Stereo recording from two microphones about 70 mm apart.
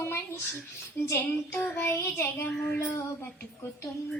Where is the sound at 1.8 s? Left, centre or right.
Left.